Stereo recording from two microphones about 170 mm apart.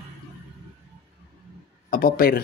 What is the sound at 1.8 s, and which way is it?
Speech, 55° left (ahead or behind).